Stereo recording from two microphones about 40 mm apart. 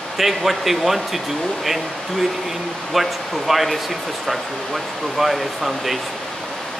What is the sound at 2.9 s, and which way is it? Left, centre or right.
A man's voice, centre.